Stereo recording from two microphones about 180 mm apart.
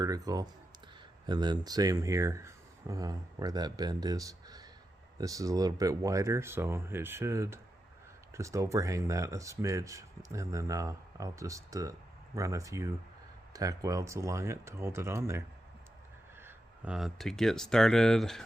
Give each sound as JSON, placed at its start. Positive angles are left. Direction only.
{"t": 0.0, "sound": "speech", "side_deg": -20}